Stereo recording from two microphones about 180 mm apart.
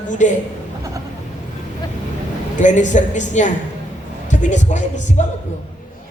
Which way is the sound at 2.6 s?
45° left (ahead or behind).